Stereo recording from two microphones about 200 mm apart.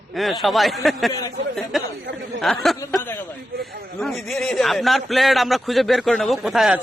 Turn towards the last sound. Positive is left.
turn(degrees=0)  # may be behind; listen again after turning